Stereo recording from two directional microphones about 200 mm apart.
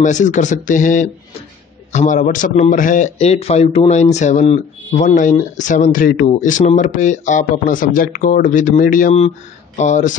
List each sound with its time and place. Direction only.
0.0 s a man's voice: 40° left (ahead or behind)